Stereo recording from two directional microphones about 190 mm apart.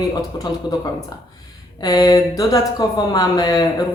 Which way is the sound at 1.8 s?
20° left (ahead or behind).